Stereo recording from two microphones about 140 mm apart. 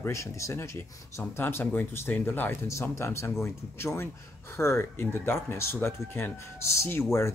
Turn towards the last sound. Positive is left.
turn(degrees=20)  # may be behind; listen again after turning